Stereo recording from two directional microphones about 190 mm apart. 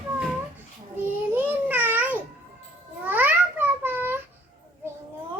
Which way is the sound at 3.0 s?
10° right (ahead or behind).